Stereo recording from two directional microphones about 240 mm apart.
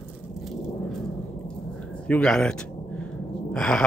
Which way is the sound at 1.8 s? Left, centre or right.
Centre.